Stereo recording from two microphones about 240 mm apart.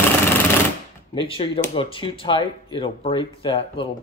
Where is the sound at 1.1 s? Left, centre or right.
Left.